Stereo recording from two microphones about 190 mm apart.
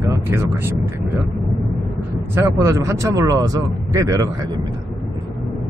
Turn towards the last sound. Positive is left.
turn(degrees=-15)  # may be behind; listen again after turning